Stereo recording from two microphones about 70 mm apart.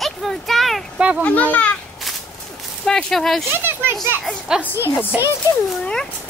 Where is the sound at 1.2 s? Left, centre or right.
Left.